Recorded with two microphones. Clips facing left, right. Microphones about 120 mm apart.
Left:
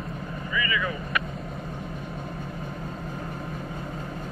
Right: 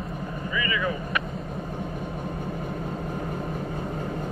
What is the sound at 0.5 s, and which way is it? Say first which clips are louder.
Speech: right 1 dB; 30° right (ahead or behind).